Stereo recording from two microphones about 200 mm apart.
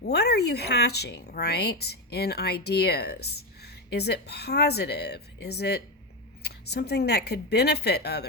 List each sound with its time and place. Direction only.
0.1 s speech: 55° left (ahead or behind)